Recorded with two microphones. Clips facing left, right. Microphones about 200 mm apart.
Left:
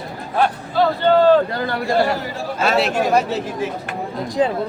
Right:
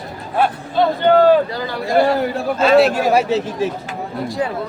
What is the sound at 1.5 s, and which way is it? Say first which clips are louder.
Speech: left 1 dB; 55° left (ahead or behind).